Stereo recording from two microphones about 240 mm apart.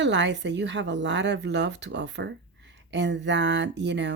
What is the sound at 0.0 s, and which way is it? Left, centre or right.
Speech, right.